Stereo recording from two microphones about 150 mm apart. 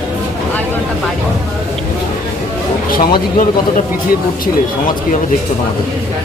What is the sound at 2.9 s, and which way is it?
Speech, 70° left (ahead or behind).